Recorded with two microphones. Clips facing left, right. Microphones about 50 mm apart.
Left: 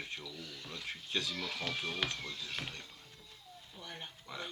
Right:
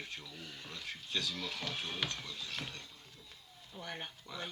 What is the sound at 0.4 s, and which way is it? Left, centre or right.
Speech, right.